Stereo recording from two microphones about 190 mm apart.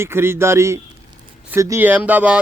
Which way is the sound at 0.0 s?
15° right (ahead or behind).